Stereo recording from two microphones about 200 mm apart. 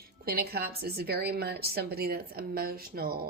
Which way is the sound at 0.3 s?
50° right (ahead or behind).